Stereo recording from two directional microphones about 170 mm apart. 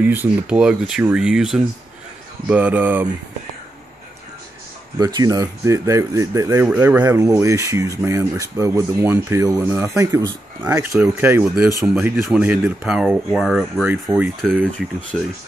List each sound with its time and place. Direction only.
0.0 s speech: 10° right (ahead or behind)
4.9 s speech: 20° right (ahead or behind)
6.7 s speech: 10° right (ahead or behind)
7.2 s speech: 20° right (ahead or behind); by 14.6 s centre (ahead or behind)